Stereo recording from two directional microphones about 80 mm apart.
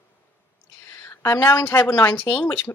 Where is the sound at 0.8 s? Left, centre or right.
Left.